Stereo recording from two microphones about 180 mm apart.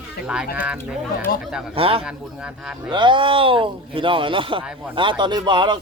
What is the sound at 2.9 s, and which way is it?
Speech, 25° right (ahead or behind).